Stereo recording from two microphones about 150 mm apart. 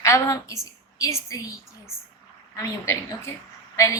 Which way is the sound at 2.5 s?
20° left (ahead or behind).